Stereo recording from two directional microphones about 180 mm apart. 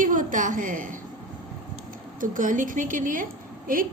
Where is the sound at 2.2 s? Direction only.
45° right (ahead or behind).